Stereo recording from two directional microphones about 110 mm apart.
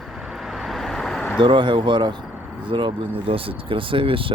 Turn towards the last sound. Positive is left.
turn(degrees=-55)  # may be behind; listen again after turning